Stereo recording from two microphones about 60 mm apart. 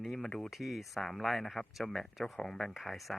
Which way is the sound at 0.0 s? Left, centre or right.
Centre.